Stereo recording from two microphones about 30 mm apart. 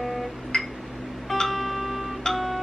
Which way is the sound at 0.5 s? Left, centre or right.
Left.